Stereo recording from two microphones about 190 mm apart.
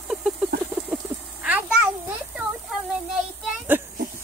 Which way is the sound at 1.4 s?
10° right (ahead or behind).